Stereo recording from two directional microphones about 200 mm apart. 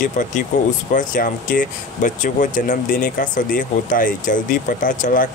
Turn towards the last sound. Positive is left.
turn(degrees=40)  # may be behind; listen again after turning